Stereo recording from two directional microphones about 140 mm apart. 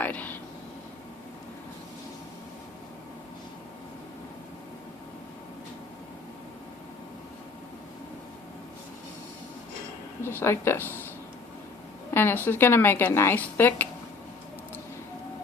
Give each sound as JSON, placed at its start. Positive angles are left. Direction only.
{"t": 0.0, "sound": "a sound", "side_deg": 10}
{"t": 10.2, "sound": "a woman's voice", "side_deg": 20}
{"t": 12.1, "sound": "a woman's voice", "side_deg": 15}